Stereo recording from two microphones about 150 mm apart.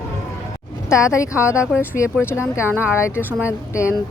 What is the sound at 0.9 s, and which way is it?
Speech, 20° left (ahead or behind).